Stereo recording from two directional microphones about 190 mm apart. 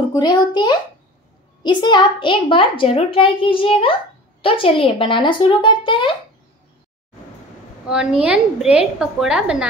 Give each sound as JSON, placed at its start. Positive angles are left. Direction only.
{"t": 0.1, "sound": "a woman's voice", "side_deg": 20}
{"t": 7.9, "sound": "a woman's voice", "side_deg": -5}